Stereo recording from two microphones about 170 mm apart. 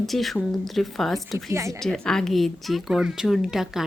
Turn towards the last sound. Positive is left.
turn(degrees=0)  # may be behind; listen again after turning